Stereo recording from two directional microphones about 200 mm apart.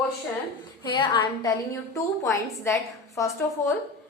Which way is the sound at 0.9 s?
25° left (ahead or behind).